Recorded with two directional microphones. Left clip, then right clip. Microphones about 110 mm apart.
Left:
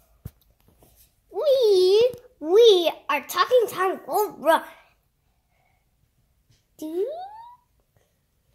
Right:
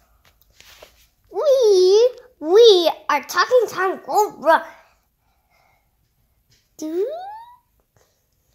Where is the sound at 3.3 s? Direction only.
15° right (ahead or behind).